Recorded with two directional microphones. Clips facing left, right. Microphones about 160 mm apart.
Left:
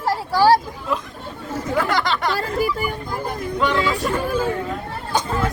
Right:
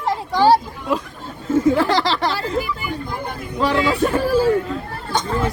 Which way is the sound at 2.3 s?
45° left (ahead or behind).